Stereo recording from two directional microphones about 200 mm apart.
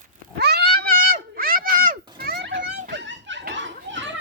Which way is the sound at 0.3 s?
55° right (ahead or behind).